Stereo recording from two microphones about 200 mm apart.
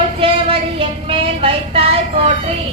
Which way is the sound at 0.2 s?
25° right (ahead or behind).